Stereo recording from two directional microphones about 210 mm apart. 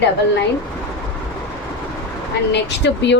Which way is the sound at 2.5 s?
55° left (ahead or behind).